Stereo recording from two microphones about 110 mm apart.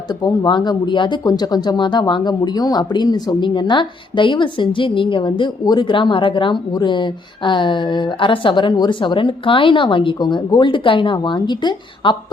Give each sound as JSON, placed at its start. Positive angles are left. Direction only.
{"t": 0.1, "sound": "speech", "side_deg": 40}